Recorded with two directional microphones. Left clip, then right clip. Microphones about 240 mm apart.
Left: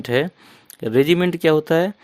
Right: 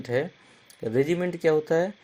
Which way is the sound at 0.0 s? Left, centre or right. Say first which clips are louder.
Left 7 dB; left.